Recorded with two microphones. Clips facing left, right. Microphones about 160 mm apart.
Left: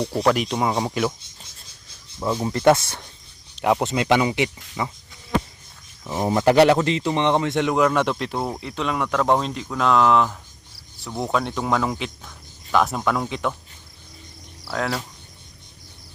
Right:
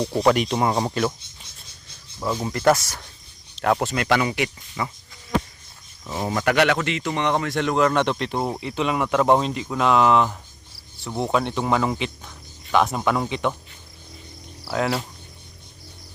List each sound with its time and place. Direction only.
0.0 s speech: centre (ahead or behind)
2.1 s speech: 15° left (ahead or behind)
2.5 s speech: 25° left (ahead or behind)
3.5 s speech: 10° left (ahead or behind)
6.2 s speech: 25° left (ahead or behind); by 13.6 s centre (ahead or behind)
14.7 s speech: 5° right (ahead or behind)